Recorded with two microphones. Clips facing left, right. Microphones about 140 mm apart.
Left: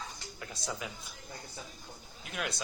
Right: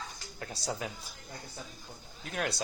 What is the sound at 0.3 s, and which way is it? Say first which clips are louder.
Speech: right 4 dB; 40° right (ahead or behind).